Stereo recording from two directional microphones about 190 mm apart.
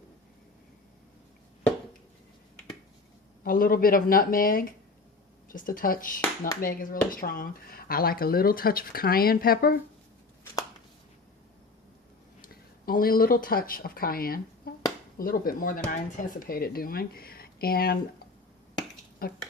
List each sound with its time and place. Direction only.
3.4 s speech: 50° left (ahead or behind)
12.4 s speech: 50° left (ahead or behind)
19.2 s speech: 50° left (ahead or behind)